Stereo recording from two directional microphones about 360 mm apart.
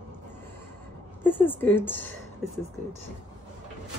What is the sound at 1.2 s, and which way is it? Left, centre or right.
Speech, centre.